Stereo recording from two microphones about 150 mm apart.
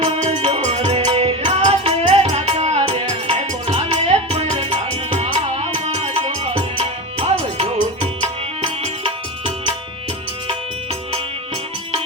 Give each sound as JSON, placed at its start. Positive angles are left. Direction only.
{"t": 0.0, "sound": "music", "side_deg": -45}